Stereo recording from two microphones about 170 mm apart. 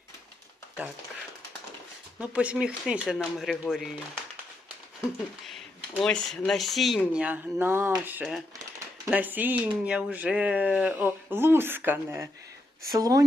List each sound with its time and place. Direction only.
2.1 s speech: 5° right (ahead or behind)
6.0 s speech: 5° left (ahead or behind); by 13.2 s 20° right (ahead or behind)